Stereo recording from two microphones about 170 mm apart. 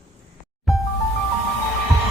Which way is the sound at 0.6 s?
Centre (ahead or behind).